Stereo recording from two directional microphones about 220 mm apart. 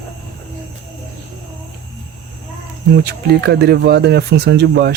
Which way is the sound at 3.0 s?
50° right (ahead or behind).